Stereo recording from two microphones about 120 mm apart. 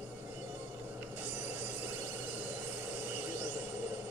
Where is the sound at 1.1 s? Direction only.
15° right (ahead or behind).